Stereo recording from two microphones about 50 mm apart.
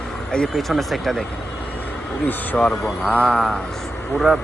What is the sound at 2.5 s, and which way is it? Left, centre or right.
Speech, left.